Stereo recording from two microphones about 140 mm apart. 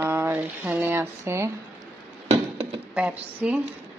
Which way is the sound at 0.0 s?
15° right (ahead or behind).